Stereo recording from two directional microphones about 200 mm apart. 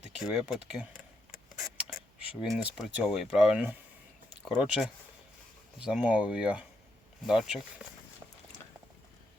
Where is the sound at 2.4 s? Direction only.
Centre (ahead or behind).